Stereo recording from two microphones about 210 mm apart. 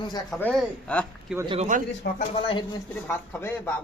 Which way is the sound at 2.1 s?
45° left (ahead or behind).